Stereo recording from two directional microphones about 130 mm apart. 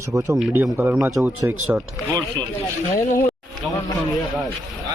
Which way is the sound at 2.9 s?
25° left (ahead or behind).